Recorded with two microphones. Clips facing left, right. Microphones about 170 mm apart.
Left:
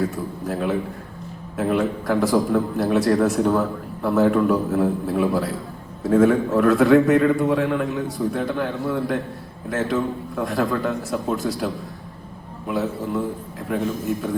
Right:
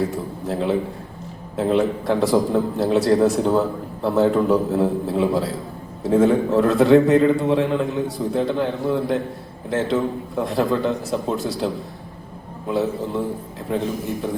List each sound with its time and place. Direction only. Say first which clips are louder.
0.0 s a man's voice: right 1 dB; 25° right (ahead or behind)
13.7 s a man's voice: right 1 dB; 25° right (ahead or behind)